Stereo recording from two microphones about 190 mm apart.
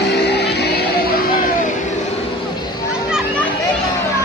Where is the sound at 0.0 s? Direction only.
60° left (ahead or behind).